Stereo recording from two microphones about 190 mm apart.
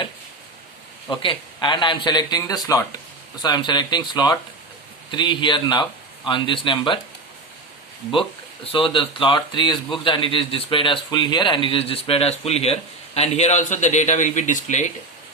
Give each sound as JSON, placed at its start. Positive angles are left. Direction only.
{"t": 1.0, "sound": "speech", "side_deg": 25}
{"t": 8.6, "sound": "speech", "side_deg": 25}